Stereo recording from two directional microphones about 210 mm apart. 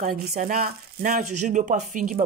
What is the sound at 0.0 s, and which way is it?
Speech, 45° right (ahead or behind).